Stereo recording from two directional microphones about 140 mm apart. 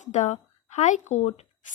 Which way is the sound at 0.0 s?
60° left (ahead or behind).